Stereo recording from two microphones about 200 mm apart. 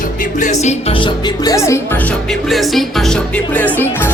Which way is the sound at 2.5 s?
Centre (ahead or behind).